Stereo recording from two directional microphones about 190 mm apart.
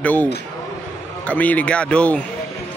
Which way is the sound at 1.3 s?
10° left (ahead or behind).